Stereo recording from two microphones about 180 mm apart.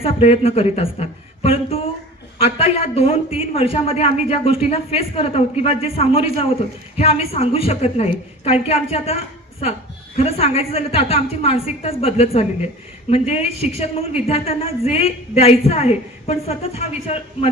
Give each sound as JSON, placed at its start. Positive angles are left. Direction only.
{"t": 0.0, "sound": "a woman's voice", "side_deg": 35}